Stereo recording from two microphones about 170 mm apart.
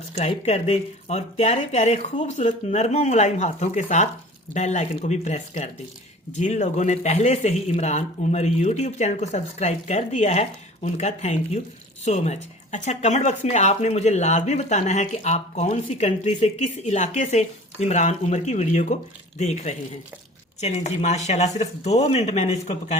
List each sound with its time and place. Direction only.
0.2 s speech: 40° left (ahead or behind)